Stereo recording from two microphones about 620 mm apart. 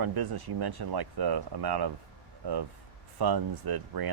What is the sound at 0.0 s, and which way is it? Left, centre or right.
Speech, right.